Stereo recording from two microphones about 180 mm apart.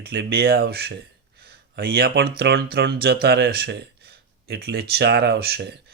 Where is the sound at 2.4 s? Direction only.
60° right (ahead or behind).